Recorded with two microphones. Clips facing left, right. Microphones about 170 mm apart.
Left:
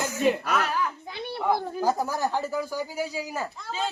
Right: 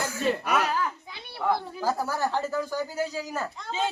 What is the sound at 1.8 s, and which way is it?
Speech, 15° left (ahead or behind).